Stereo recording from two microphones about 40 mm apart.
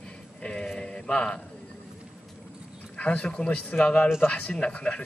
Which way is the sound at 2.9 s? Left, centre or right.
Left.